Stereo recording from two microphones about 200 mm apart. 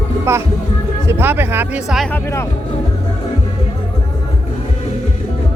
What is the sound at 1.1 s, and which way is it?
Speech, 10° right (ahead or behind).